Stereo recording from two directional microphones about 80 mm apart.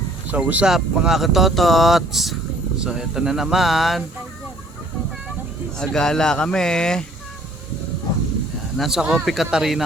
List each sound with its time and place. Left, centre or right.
0.3 s speech: centre
0.7 s speech: centre
5.8 s speech: centre
8.8 s speech: centre